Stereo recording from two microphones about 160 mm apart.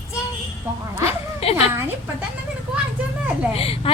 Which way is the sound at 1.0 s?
40° left (ahead or behind).